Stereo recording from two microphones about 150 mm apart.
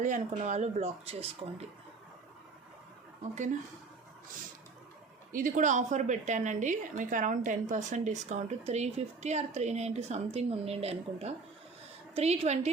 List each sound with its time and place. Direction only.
0.0 s a woman's voice: 55° right (ahead or behind)
5.3 s a woman's voice: 65° right (ahead or behind); by 12.7 s 45° right (ahead or behind)